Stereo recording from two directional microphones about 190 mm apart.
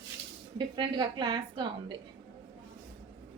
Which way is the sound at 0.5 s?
25° right (ahead or behind).